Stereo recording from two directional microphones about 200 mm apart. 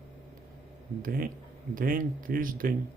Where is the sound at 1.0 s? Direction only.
45° right (ahead or behind).